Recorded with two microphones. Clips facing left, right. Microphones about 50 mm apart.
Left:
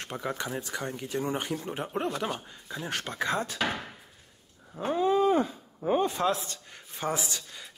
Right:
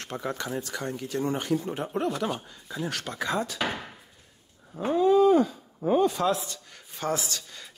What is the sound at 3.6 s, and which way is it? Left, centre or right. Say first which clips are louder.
Speech: even; centre.